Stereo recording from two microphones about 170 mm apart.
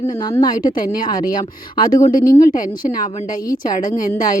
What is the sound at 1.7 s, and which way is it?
Speech, 20° left (ahead or behind).